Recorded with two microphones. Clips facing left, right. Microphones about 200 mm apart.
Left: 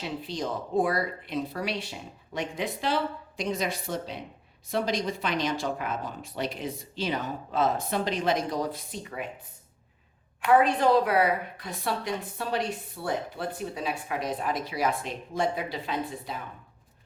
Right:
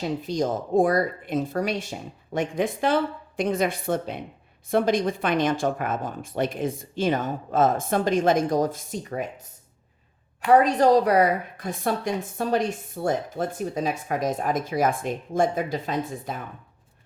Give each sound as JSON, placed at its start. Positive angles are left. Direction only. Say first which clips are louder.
{"t": 0.0, "sound": "a woman's voice", "louder": "right 7 dB", "side_deg": -45}